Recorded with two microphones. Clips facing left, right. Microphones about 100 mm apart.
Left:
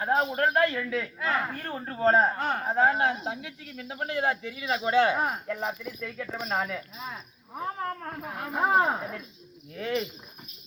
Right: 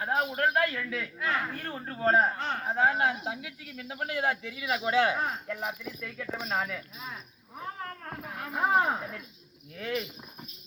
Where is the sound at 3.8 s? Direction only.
25° left (ahead or behind).